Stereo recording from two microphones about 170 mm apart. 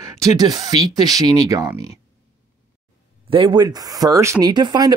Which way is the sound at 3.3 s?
25° right (ahead or behind).